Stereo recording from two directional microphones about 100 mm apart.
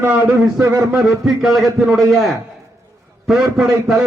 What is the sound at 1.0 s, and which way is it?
A man's voice, centre (ahead or behind).